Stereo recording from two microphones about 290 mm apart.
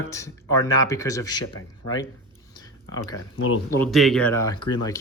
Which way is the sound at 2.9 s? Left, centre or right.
Left.